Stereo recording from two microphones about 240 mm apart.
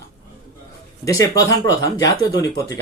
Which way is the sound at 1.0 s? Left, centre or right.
Centre.